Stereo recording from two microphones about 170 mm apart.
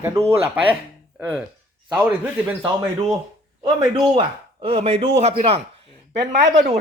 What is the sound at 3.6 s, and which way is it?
A man's voice, 25° right (ahead or behind).